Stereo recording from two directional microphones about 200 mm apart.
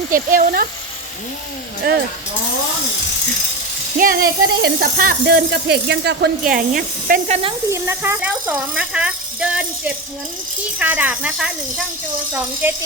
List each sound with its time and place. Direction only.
0.1 s speech: 45° right (ahead or behind)
3.9 s speech: 45° right (ahead or behind)
6.4 s speech: 45° right (ahead or behind)
7.7 s speech: 10° right (ahead or behind)
12.6 s speech: 10° right (ahead or behind)